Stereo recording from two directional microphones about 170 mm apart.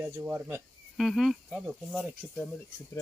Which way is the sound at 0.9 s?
Centre (ahead or behind).